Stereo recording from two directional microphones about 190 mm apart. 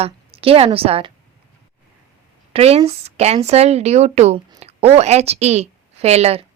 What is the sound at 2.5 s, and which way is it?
A woman's voice, 30° right (ahead or behind).